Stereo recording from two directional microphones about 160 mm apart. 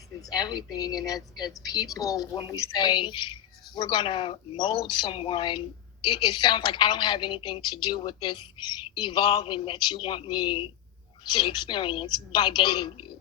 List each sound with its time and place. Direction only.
0.2 s speech: 25° left (ahead or behind)